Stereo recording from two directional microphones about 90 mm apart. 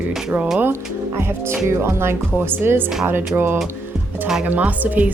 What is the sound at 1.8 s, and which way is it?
Speech, 30° right (ahead or behind).